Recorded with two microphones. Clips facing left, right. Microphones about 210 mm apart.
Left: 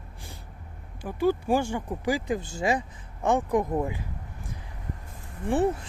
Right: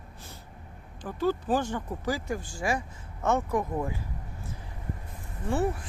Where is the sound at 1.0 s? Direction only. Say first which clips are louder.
Left 3 dB; 10° left (ahead or behind).